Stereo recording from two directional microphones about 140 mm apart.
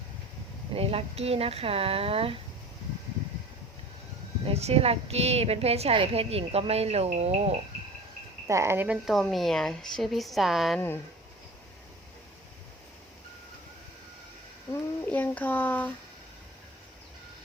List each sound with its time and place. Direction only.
0.7 s a woman's voice: 45° right (ahead or behind)
4.4 s a woman's voice: 45° right (ahead or behind)
8.4 s speech: 20° right (ahead or behind)
9.0 s a woman's voice: centre (ahead or behind)
10.8 s speech: 15° left (ahead or behind)
14.7 s speech: 15° left (ahead or behind)